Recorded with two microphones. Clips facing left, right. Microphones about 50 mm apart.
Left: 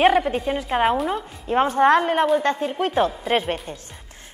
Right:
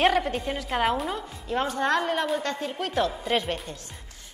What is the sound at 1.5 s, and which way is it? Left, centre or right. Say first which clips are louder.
A woman's voice: left 8 dB; left.